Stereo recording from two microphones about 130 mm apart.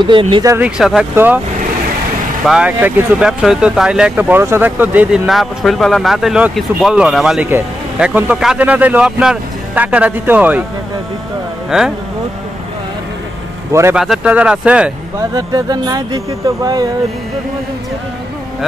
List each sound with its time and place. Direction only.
0.0 s speech: 40° right (ahead or behind)
0.6 s speech: 5° right (ahead or behind)
1.1 s a man's voice: 15° right (ahead or behind)
2.4 s a man's voice: 5° right (ahead or behind)
13.7 s speech: 20° right (ahead or behind)
13.9 s a man's voice: 5° right (ahead or behind)
15.3 s speech: 30° right (ahead or behind)